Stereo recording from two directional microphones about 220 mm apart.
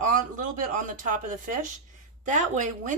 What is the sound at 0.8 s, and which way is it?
Speech, 35° right (ahead or behind).